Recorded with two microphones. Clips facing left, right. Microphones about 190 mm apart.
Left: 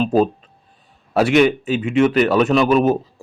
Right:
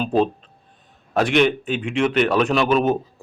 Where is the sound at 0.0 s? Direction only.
5° left (ahead or behind).